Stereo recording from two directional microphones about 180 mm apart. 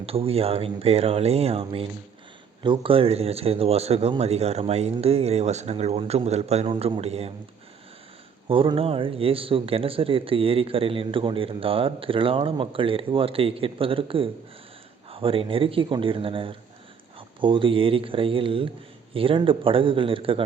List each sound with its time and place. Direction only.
0.0 s speech: 30° right (ahead or behind)
8.4 s speech: 30° right (ahead or behind)